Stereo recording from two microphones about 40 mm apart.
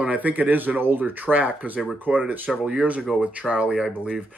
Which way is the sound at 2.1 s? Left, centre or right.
Right.